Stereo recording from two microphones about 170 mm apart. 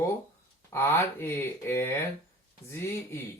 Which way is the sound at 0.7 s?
15° left (ahead or behind).